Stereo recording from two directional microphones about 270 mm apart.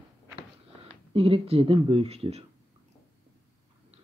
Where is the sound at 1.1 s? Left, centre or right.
Centre.